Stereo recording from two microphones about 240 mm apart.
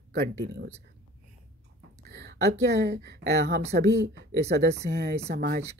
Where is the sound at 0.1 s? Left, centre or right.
Right.